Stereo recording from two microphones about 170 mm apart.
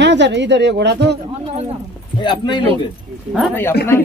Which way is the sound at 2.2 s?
25° left (ahead or behind).